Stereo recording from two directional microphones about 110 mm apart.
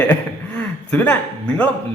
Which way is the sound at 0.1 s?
15° left (ahead or behind).